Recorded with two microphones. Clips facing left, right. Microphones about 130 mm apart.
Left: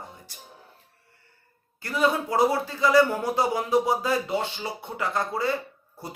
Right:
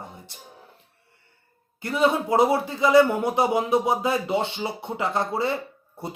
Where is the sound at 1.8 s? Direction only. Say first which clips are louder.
Right 2 dB; 25° right (ahead or behind).